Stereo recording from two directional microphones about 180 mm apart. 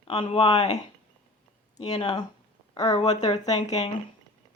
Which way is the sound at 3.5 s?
35° left (ahead or behind).